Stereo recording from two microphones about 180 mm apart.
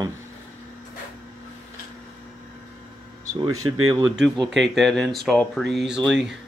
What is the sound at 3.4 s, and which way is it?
Speech, 20° right (ahead or behind).